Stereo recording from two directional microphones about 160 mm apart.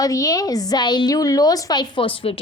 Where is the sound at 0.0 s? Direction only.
20° left (ahead or behind).